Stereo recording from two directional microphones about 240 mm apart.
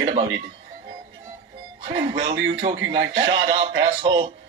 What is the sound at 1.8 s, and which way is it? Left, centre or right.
A man's voice, right.